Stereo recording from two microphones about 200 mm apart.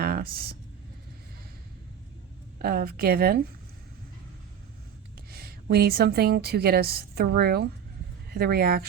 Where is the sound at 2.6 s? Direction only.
50° right (ahead or behind).